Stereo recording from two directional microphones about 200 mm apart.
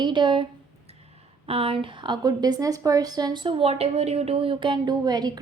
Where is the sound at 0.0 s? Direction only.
20° right (ahead or behind).